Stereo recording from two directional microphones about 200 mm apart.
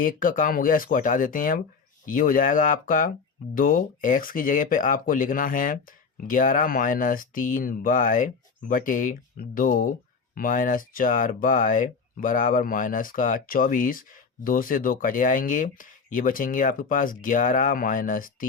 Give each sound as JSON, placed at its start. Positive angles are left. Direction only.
{"t": 0.0, "sound": "speech", "side_deg": 40}